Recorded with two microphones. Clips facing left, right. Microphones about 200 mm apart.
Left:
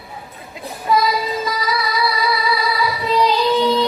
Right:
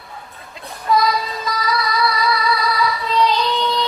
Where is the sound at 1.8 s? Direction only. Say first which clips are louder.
Even; centre (ahead or behind).